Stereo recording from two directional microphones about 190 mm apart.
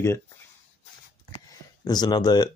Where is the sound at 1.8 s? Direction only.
20° left (ahead or behind).